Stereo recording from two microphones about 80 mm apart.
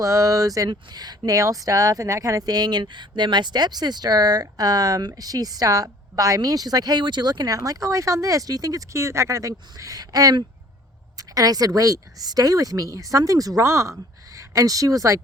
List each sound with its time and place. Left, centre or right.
0.0 s speech: right
0.7 s a woman's voice: right